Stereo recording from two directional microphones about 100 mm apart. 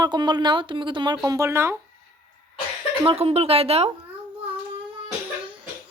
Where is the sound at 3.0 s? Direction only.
75° right (ahead or behind).